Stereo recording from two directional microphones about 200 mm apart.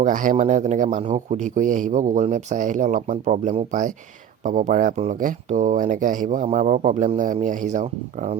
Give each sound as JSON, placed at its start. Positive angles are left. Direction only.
{"t": 0.0, "sound": "a man's voice", "side_deg": -40}